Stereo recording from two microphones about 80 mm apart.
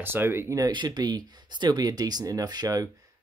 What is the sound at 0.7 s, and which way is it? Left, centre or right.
Speech, right.